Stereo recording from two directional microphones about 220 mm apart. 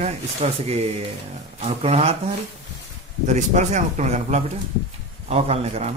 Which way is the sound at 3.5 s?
30° right (ahead or behind).